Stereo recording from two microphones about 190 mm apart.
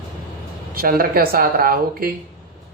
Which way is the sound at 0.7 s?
50° right (ahead or behind).